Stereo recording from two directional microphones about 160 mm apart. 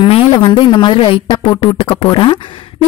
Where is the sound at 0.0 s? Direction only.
30° left (ahead or behind).